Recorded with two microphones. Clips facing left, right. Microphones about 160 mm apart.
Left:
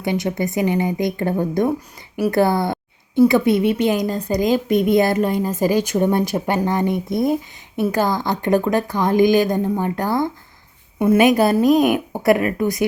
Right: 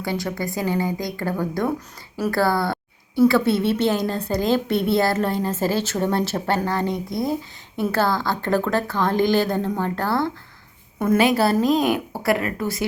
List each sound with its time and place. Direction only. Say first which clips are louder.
0.0 s a woman's voice: left 5 dB; 20° left (ahead or behind)